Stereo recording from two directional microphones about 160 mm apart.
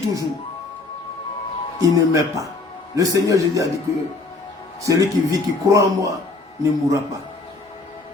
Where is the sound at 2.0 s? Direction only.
20° right (ahead or behind).